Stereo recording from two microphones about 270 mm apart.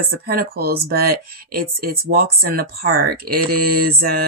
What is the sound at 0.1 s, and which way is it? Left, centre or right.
Speech, right.